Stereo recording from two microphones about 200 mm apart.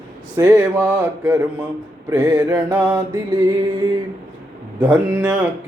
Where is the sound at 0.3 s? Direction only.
10° right (ahead or behind).